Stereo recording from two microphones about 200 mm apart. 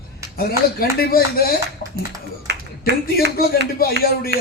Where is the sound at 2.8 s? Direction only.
50° left (ahead or behind).